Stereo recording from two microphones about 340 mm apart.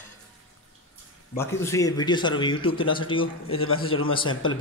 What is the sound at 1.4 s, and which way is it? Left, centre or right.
Speech, centre.